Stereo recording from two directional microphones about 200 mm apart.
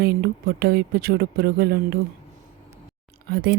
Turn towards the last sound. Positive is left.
turn(degrees=-55)  # may be behind; listen again after turning